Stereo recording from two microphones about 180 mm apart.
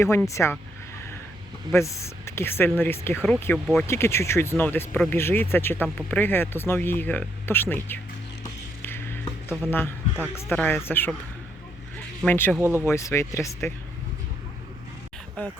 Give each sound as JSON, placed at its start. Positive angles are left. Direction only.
{"t": 0.0, "sound": "speech", "side_deg": 15}
{"t": 1.7, "sound": "speech", "side_deg": 15}
{"t": 8.4, "sound": "music", "side_deg": 15}
{"t": 12.2, "sound": "speech", "side_deg": 10}
{"t": 12.5, "sound": "speech", "side_deg": -10}
{"t": 12.8, "sound": "speech", "side_deg": 15}